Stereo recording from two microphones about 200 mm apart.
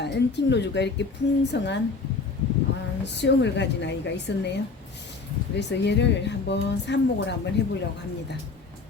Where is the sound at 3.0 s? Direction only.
60° left (ahead or behind).